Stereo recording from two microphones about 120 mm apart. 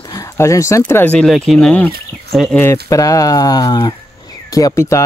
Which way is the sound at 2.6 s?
25° left (ahead or behind).